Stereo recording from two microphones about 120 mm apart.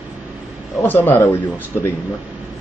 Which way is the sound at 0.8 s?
15° left (ahead or behind).